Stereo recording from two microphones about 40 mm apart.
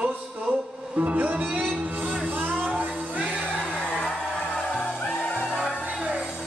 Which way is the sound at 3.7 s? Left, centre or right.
Left.